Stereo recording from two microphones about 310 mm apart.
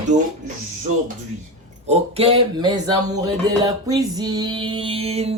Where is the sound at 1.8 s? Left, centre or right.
Right.